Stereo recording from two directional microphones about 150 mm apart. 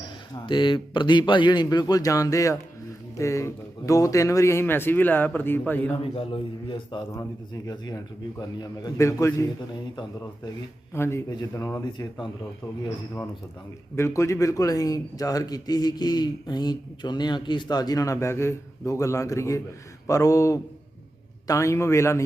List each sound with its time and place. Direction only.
0.3 s a man's voice: 30° left (ahead or behind); by 5.9 s 10° left (ahead or behind)
6.0 s a man's voice: 35° left (ahead or behind)
10.9 s a man's voice: 15° left (ahead or behind)
11.9 s a man's voice: 30° left (ahead or behind)
13.9 s a man's voice: 20° left (ahead or behind)